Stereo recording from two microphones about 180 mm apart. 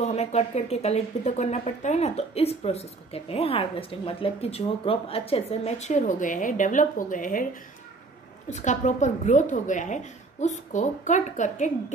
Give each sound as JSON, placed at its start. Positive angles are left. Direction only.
{"t": 0.0, "sound": "speech", "side_deg": 35}
{"t": 8.5, "sound": "a woman's voice", "side_deg": 40}